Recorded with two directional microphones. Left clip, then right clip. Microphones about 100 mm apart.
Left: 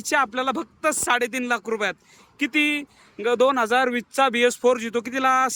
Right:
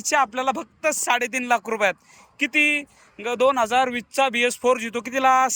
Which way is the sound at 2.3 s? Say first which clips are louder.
Right 2 dB; 20° left (ahead or behind).